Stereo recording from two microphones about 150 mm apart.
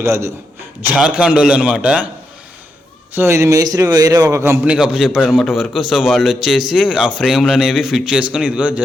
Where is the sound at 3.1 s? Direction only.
15° right (ahead or behind).